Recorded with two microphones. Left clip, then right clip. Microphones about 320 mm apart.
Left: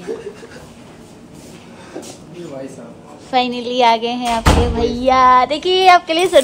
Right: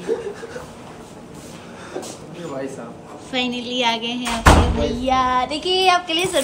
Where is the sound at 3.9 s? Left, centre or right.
Centre.